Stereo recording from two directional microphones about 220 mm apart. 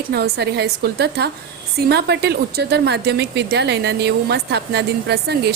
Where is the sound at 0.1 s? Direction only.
45° right (ahead or behind).